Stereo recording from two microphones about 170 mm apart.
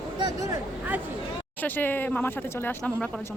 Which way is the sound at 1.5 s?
10° left (ahead or behind).